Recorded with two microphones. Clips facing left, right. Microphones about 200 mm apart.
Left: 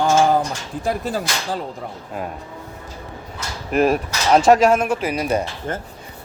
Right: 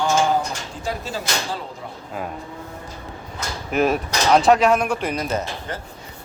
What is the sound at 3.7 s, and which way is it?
Speech, centre (ahead or behind).